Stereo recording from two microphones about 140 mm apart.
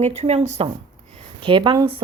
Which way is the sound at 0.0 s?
50° right (ahead or behind).